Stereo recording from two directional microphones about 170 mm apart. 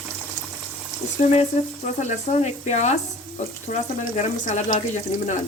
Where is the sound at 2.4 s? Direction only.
45° left (ahead or behind).